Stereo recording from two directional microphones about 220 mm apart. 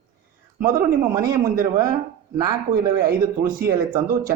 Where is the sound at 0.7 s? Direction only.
15° right (ahead or behind).